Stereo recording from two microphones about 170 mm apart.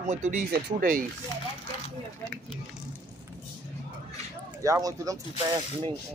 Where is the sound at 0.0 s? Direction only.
45° right (ahead or behind).